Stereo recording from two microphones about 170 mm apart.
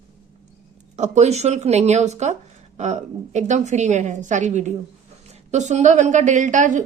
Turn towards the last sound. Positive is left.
turn(degrees=-50)  # may be behind; listen again after turning